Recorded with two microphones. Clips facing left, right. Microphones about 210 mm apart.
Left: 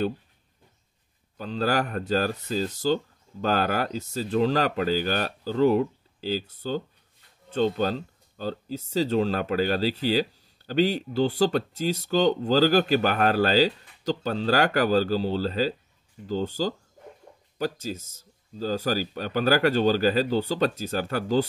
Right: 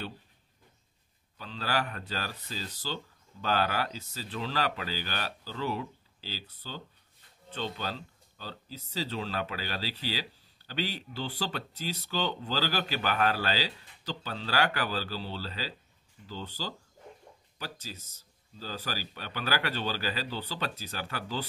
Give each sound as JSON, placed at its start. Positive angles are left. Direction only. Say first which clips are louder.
{"t": 1.4, "sound": "speech", "louder": "left 8 dB", "side_deg": 45}